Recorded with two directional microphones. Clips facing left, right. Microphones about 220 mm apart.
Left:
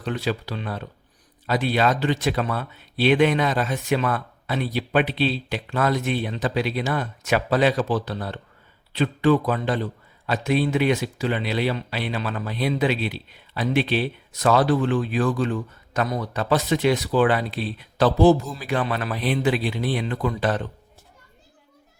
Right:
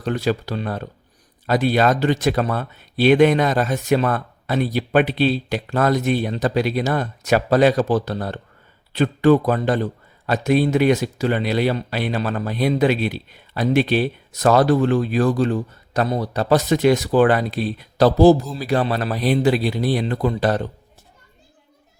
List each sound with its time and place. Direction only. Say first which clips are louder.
0.0 s a man's voice: right 5 dB; 45° right (ahead or behind)